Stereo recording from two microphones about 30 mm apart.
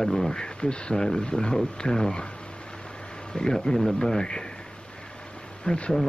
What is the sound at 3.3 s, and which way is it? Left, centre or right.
Speech, left.